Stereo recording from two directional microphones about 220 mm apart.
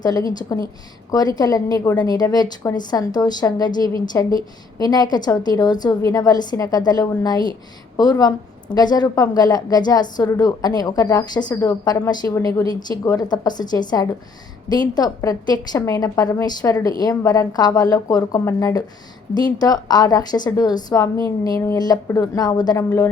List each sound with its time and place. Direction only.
0.0 s a woman's voice: 15° left (ahead or behind)